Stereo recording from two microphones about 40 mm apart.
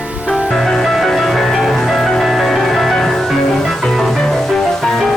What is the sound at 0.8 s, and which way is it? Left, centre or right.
Music, centre.